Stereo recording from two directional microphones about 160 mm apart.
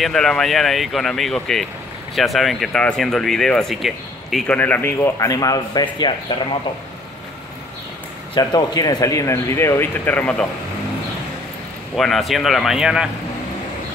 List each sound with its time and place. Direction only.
0.0 s speech: 5° left (ahead or behind)
4.6 s speech: 10° left (ahead or behind); by 6.3 s 25° left (ahead or behind)
8.4 s speech: 25° left (ahead or behind)
11.9 s speech: centre (ahead or behind)